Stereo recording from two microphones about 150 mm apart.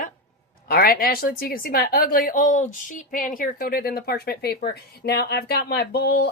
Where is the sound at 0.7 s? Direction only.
85° left.